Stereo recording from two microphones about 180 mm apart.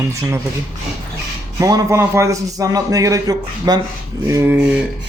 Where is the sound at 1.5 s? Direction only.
15° right (ahead or behind).